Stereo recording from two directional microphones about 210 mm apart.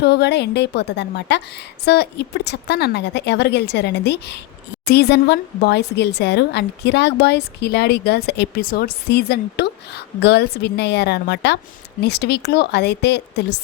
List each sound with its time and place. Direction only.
0.0 s speech: 55° left (ahead or behind)